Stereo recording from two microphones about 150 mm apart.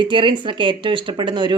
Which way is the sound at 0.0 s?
35° right (ahead or behind).